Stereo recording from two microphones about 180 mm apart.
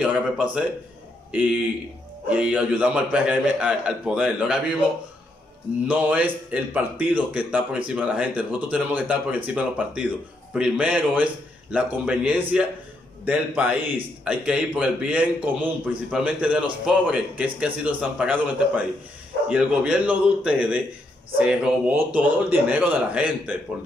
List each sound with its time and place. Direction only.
0.0 s speech: 5° right (ahead or behind)
2.2 s a man's voice: 5° right (ahead or behind)
5.9 s a man's voice: 10° right (ahead or behind)